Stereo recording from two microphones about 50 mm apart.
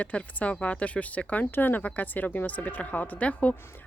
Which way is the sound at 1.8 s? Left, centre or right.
Left.